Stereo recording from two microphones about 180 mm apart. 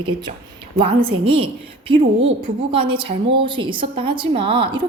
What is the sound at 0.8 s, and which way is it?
A woman's voice, 30° right (ahead or behind).